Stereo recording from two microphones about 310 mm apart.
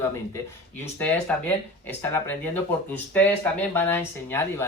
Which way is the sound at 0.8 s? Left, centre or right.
Centre.